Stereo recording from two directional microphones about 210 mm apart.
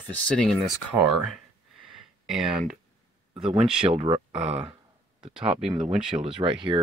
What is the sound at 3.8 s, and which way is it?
Speech, 25° right (ahead or behind).